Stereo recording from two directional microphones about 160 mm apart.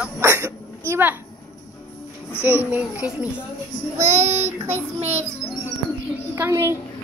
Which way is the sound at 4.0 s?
45° right (ahead or behind).